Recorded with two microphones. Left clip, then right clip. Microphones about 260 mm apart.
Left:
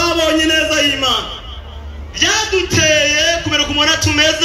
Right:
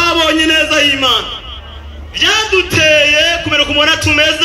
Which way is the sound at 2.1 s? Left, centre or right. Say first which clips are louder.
Right 3 dB; centre.